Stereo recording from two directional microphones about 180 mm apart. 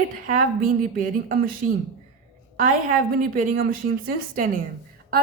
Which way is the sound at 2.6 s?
45° right (ahead or behind).